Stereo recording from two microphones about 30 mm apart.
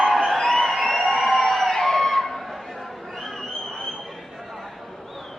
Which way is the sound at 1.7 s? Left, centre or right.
Centre.